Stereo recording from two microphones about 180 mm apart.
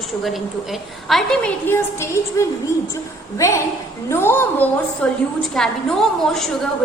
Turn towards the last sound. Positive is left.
turn(degrees=0)  # may be behind; listen again after turning